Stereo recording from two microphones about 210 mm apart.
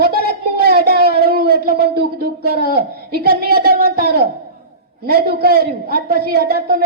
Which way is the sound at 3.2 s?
45° right (ahead or behind).